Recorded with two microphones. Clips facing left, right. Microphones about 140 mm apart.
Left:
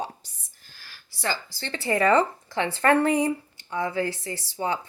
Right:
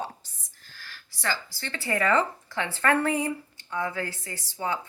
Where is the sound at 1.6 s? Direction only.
25° left (ahead or behind).